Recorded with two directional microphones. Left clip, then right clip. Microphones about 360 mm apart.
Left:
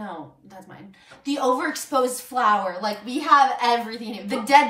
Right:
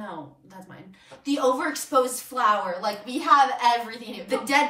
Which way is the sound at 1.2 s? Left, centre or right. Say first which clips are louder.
Left 1 dB; centre.